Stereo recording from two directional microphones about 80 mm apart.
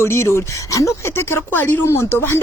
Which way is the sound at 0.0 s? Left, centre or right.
Left.